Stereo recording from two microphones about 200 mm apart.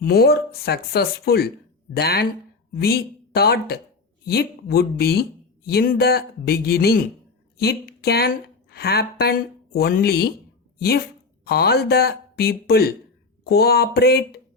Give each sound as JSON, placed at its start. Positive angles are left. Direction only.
{"t": 0.0, "sound": "a woman's voice", "side_deg": 50}